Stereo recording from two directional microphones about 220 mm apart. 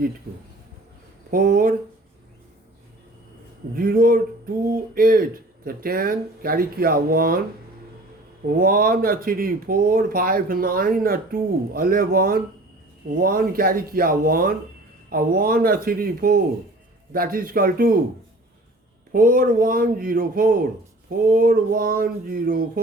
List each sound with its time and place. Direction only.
1.3 s speech: 40° right (ahead or behind)
3.8 s speech: 40° right (ahead or behind)
8.4 s speech: 40° right (ahead or behind)
19.1 s speech: 40° right (ahead or behind)